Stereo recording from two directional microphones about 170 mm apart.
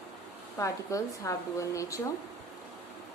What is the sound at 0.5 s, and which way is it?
Speech, 20° left (ahead or behind).